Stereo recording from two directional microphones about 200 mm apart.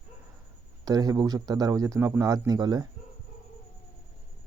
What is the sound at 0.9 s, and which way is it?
Speech, 20° right (ahead or behind).